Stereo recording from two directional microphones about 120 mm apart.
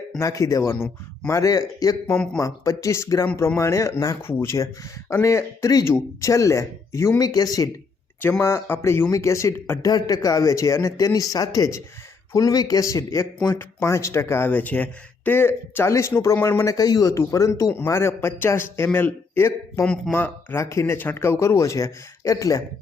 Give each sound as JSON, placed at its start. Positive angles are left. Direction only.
{"t": 0.2, "sound": "speech", "side_deg": 25}
{"t": 2.1, "sound": "speech", "side_deg": 10}
{"t": 2.4, "sound": "speech", "side_deg": 25}
{"t": 8.2, "sound": "speech", "side_deg": 20}
{"t": 16.7, "sound": "speech", "side_deg": 30}
{"t": 19.8, "sound": "speech", "side_deg": 10}
{"t": 20.6, "sound": "speech", "side_deg": 25}